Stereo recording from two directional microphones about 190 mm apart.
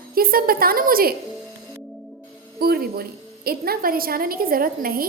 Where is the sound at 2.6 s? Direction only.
55° right (ahead or behind).